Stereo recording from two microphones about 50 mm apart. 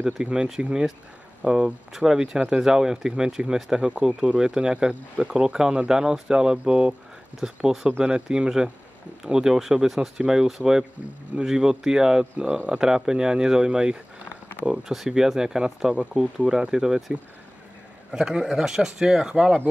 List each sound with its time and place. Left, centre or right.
0.0 s speech: centre
18.1 s speech: centre